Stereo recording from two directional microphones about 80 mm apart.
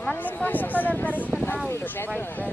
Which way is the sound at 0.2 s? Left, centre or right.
Left.